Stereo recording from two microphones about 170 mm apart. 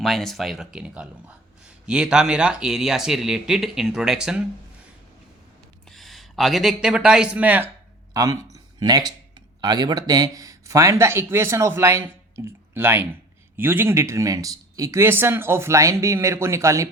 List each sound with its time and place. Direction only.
0.0 s speech: centre (ahead or behind)
5.9 s a man's voice: centre (ahead or behind); by 16.9 s 15° right (ahead or behind)